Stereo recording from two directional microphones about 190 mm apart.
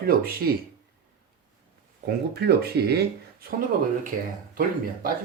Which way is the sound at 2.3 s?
55° right (ahead or behind).